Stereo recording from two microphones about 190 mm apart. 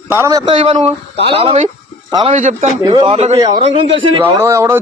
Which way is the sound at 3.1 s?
35° right (ahead or behind).